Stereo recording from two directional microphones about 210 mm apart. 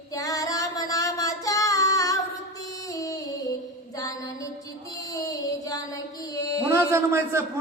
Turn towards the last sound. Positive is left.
turn(degrees=-10)  # may be behind; listen again after turning